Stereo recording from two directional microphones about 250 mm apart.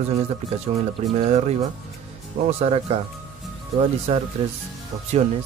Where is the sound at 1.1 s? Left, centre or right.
Right.